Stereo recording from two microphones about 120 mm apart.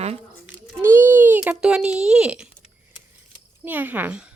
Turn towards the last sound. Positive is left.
turn(degrees=-15)  # may be behind; listen again after turning